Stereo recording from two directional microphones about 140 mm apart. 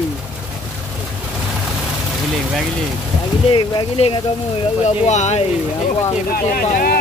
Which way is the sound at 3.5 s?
40° left (ahead or behind).